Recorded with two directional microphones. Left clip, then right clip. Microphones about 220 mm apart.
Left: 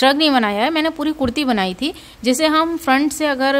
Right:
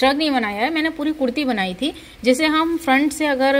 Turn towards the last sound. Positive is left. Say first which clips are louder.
# even
turn(degrees=15)  # may be behind; listen again after turning